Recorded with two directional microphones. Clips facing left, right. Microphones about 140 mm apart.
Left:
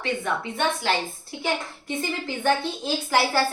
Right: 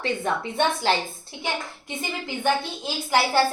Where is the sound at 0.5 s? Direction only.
30° right (ahead or behind).